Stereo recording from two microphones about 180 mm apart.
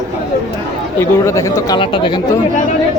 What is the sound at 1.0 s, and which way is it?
Speech, 15° left (ahead or behind).